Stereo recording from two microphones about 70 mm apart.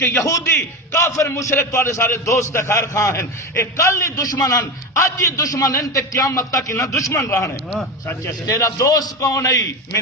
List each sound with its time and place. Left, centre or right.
0.0 s a man's voice: left
1.5 s a man's voice: left
4.2 s a man's voice: left